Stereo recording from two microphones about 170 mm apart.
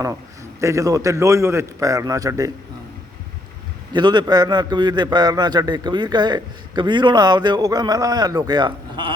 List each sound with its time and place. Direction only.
0.6 s a man's voice: 20° right (ahead or behind)
3.9 s a man's voice: 25° right (ahead or behind)